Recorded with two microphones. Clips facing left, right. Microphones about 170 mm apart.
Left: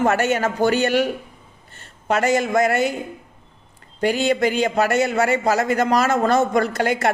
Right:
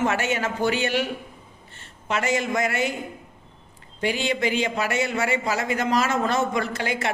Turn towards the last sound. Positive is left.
turn(degrees=45)  # may be behind; listen again after turning